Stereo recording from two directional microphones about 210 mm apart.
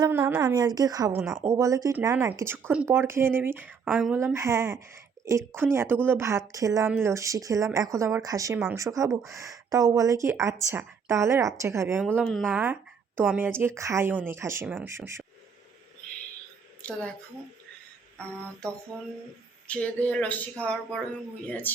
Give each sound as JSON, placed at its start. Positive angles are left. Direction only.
{"t": 0.0, "sound": "a woman's voice", "side_deg": -10}
{"t": 16.8, "sound": "speech", "side_deg": 5}
{"t": 19.6, "sound": "speech", "side_deg": 5}